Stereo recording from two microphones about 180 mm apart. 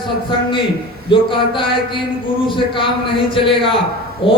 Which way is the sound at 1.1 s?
30° left (ahead or behind).